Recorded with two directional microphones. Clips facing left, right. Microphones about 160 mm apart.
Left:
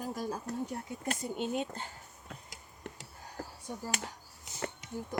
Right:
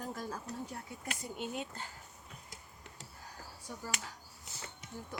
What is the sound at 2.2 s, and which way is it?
Tick-tock, 60° left (ahead or behind).